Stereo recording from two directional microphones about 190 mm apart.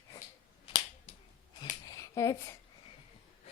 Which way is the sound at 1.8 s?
20° left (ahead or behind).